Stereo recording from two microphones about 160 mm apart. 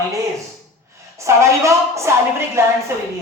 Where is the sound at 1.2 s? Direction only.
20° right (ahead or behind).